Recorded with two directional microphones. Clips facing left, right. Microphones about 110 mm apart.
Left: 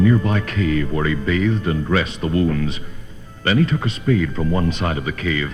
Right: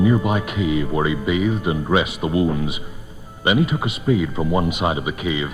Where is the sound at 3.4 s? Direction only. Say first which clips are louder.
Even; 15° right (ahead or behind).